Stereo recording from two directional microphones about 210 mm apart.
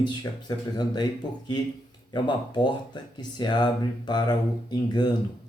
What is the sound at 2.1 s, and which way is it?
Speech, 20° left (ahead or behind).